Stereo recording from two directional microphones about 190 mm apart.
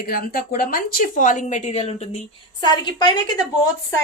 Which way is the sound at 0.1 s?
50° left (ahead or behind).